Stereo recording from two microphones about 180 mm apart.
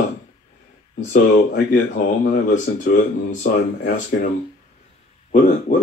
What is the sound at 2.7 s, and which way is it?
Speech, 65° left (ahead or behind).